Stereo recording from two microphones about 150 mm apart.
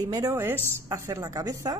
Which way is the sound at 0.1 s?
20° right (ahead or behind).